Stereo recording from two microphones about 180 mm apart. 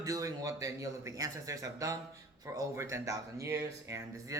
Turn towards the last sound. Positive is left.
turn(degrees=-15)  # may be behind; listen again after turning